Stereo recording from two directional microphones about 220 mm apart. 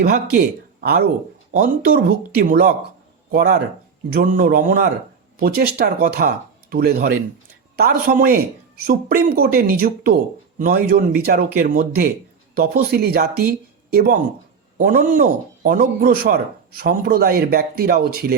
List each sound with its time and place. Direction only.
0.0 s a man's voice: 40° right (ahead or behind)